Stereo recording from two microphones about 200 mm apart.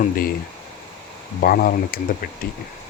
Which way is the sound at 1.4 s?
45° left (ahead or behind).